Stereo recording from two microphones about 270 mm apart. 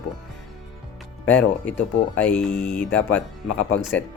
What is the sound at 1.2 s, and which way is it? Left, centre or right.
Speech, centre.